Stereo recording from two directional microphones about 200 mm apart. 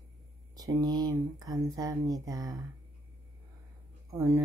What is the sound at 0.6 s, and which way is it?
Speech, 20° right (ahead or behind).